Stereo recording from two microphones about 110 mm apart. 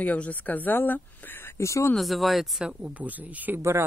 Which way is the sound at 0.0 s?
15° left (ahead or behind).